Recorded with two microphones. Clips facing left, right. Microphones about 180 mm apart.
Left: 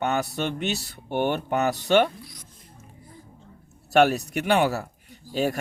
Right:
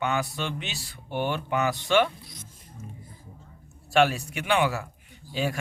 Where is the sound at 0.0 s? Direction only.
50° left (ahead or behind).